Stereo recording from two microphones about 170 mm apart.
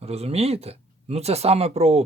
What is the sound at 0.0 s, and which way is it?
Speech, 35° right (ahead or behind).